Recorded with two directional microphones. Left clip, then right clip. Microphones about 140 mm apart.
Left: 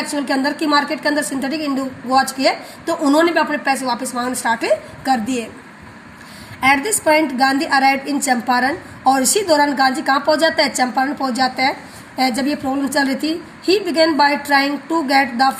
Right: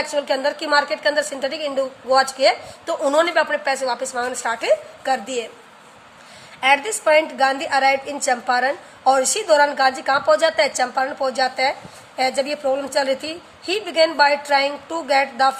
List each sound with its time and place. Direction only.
0.3 s a woman's voice: 30° left (ahead or behind)
6.6 s a woman's voice: 30° left (ahead or behind)